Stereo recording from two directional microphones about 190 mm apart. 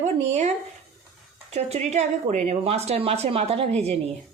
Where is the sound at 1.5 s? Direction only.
35° right (ahead or behind).